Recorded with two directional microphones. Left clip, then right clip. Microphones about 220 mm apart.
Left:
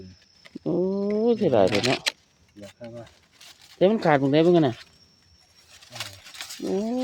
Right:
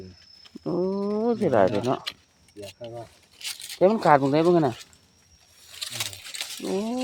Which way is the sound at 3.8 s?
15° left (ahead or behind).